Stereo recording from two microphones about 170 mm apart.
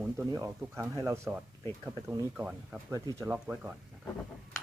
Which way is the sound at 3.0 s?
20° right (ahead or behind).